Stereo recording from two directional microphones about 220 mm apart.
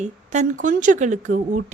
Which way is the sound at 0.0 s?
35° right (ahead or behind).